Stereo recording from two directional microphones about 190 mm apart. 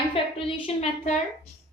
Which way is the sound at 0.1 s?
30° left (ahead or behind).